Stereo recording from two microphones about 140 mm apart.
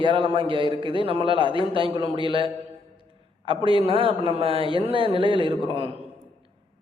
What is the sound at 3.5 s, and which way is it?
A man's voice, 40° right (ahead or behind).